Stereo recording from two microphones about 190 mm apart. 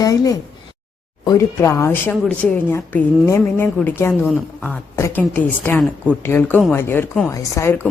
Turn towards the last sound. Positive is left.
turn(degrees=10)  # may be behind; listen again after turning